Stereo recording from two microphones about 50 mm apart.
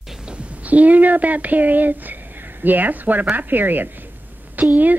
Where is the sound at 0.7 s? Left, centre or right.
Right.